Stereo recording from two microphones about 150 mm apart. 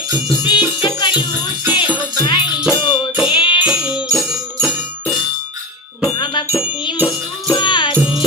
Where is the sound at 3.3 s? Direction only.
30° left (ahead or behind).